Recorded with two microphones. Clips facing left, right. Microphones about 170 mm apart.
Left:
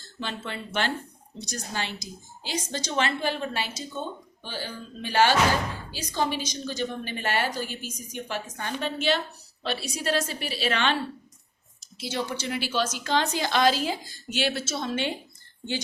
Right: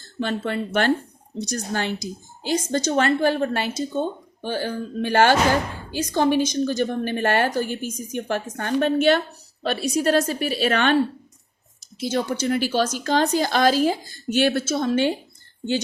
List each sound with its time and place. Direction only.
0.2 s a woman's voice: 50° right (ahead or behind)
11.9 s a woman's voice: 45° right (ahead or behind)